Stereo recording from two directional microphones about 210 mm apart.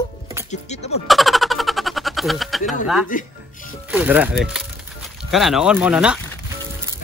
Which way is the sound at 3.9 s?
10° right (ahead or behind).